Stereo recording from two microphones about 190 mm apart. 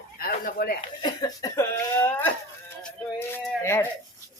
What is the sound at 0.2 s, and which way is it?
Speech, 55° left (ahead or behind).